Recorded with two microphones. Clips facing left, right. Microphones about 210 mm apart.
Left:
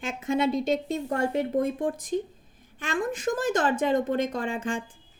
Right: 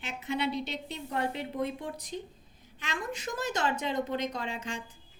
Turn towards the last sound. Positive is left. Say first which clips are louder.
# left 7 dB
turn(degrees=50)  # may be behind; listen again after turning